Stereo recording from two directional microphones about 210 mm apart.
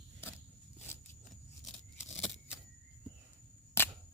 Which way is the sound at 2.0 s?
10° left (ahead or behind).